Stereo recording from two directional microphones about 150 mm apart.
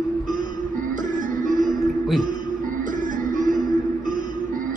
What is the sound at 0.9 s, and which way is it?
Music, 60° right (ahead or behind).